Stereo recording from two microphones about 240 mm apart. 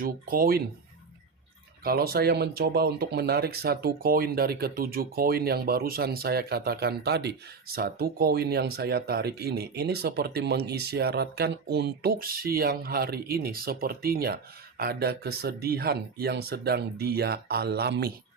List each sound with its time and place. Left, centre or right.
0.0 s speech: right
1.8 s speech: right